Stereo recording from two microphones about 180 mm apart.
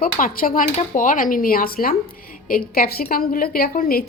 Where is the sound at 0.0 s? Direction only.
50° left (ahead or behind).